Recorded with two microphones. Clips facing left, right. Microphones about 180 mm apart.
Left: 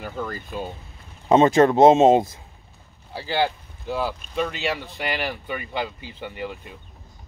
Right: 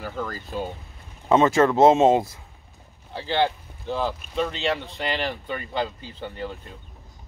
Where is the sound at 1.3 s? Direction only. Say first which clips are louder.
Left 3 dB; 20° left (ahead or behind).